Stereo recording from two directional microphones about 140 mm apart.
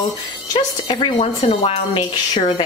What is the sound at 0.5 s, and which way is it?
Speech, 30° left (ahead or behind).